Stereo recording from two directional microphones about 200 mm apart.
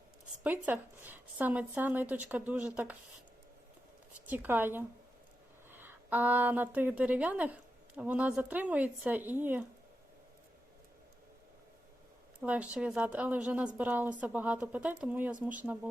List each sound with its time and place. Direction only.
0.4 s a woman's voice: 10° right (ahead or behind)
4.3 s a woman's voice: 10° right (ahead or behind)
12.4 s a woman's voice: 5° right (ahead or behind)